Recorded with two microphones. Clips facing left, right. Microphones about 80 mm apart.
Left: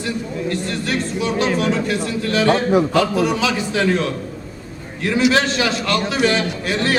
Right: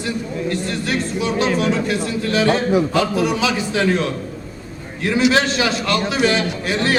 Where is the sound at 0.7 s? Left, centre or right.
Centre.